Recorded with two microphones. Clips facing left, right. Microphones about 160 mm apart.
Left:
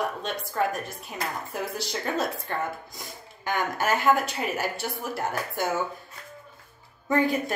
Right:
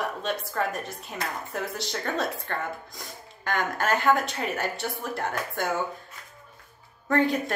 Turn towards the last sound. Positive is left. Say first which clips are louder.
# even
turn(degrees=0)  # may be behind; listen again after turning